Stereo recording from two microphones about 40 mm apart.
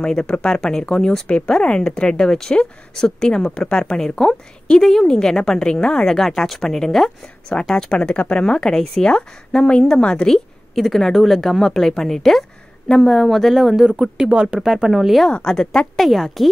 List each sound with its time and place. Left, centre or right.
0.0 s a woman's voice: centre
3.9 s a woman's voice: centre
7.9 s speech: left
10.2 s a woman's voice: centre
14.0 s speech: centre
14.3 s speech: right
14.6 s speech: centre
15.2 s a woman's voice: centre
16.0 s speech: centre